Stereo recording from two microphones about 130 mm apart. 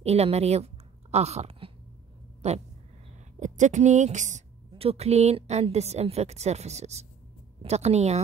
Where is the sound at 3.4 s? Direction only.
70° right (ahead or behind).